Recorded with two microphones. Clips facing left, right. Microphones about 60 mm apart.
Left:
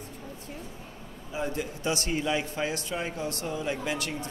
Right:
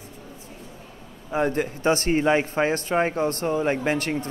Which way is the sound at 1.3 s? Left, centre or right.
Right.